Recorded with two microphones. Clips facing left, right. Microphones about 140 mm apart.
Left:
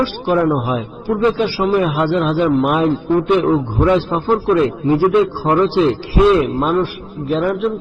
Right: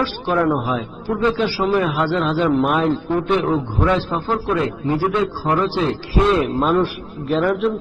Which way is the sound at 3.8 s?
15° left (ahead or behind).